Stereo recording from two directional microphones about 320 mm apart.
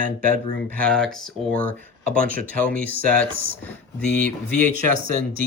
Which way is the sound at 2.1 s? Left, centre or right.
Right.